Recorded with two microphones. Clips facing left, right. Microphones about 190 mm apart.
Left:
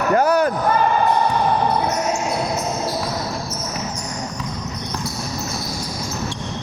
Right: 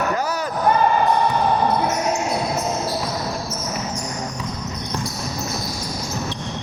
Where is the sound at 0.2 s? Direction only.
55° left (ahead or behind).